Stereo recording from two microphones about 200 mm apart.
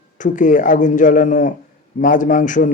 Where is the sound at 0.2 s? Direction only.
40° left (ahead or behind).